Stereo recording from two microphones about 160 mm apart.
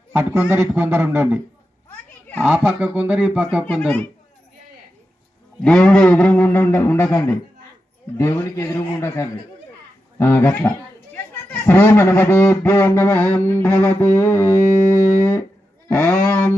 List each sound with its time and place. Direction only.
0.1 s a man's voice: 10° right (ahead or behind)
2.4 s a man's voice: 10° right (ahead or behind)
3.7 s speech: 5° left (ahead or behind)
5.6 s speech: 5° left (ahead or behind)
10.2 s chatter: 15° left (ahead or behind)
11.6 s speech: 15° left (ahead or behind)